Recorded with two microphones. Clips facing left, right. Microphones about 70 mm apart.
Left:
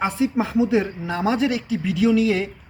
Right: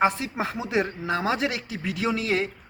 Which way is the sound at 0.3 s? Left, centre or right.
Right.